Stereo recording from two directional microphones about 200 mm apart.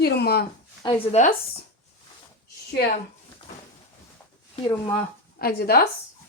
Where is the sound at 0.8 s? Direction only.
30° left (ahead or behind).